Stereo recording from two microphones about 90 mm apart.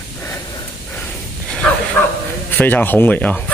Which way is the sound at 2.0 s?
30° left (ahead or behind).